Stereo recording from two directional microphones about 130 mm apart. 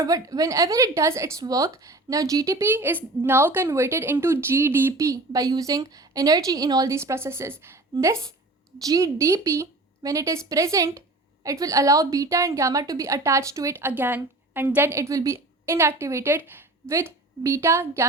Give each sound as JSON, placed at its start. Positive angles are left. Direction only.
{"t": 0.0, "sound": "a woman's voice", "side_deg": -25}